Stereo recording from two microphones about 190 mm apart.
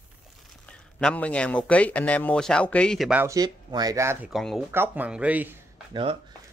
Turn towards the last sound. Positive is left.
turn(degrees=-30)  # may be behind; listen again after turning